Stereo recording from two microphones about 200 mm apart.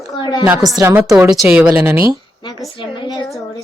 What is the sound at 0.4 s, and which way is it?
A woman's voice, 5° right (ahead or behind).